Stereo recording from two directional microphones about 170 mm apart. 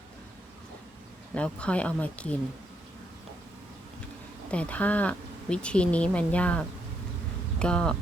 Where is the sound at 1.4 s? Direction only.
5° left (ahead or behind).